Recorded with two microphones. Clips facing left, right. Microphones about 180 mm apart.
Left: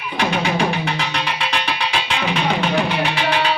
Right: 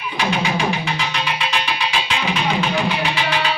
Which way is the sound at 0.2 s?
60° left (ahead or behind).